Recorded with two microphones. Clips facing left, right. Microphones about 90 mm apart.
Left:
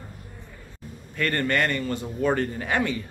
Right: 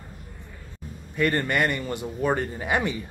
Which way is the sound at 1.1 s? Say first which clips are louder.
Right 1 dB; 15° right (ahead or behind).